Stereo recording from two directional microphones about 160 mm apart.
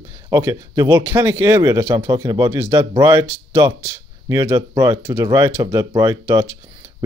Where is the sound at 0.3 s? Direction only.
20° right (ahead or behind).